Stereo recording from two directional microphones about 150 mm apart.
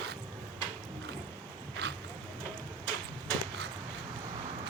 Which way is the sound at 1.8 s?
90° right.